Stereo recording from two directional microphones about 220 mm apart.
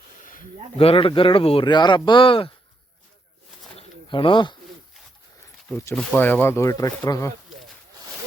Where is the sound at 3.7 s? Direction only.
25° left (ahead or behind).